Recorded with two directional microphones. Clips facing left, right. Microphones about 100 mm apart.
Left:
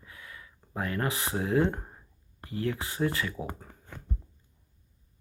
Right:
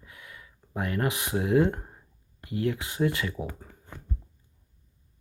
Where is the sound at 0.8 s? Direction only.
20° right (ahead or behind).